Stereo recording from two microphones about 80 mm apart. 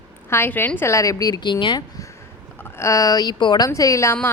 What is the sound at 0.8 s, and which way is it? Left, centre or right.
A woman's voice, left.